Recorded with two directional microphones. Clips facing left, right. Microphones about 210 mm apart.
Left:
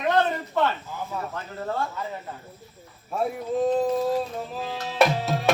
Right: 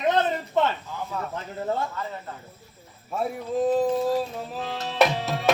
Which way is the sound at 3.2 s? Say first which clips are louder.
Left 1 dB; centre (ahead or behind).